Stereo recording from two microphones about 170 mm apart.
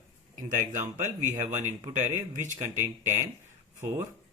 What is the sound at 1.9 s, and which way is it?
Speech, 45° right (ahead or behind).